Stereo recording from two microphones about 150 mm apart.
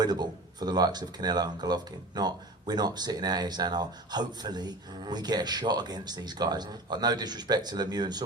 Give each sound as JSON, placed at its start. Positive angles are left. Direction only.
{"t": 0.0, "sound": "speech", "side_deg": -30}